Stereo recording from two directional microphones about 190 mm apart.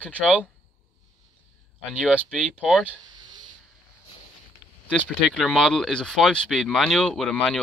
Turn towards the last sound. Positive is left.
turn(degrees=5)  # may be behind; listen again after turning